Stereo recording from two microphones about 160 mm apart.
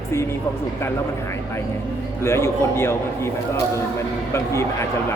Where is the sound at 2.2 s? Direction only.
15° left (ahead or behind).